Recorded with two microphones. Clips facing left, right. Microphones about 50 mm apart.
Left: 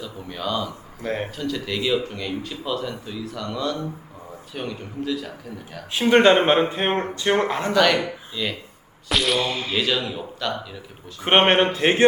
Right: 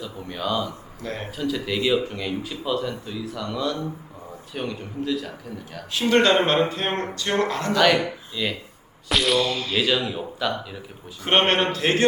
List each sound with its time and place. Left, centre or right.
0.0 s speech: centre
1.0 s speech: left
1.4 s speech: centre
5.9 s speech: left
7.7 s speech: centre
9.4 s speech: left
9.7 s speech: centre
11.2 s speech: left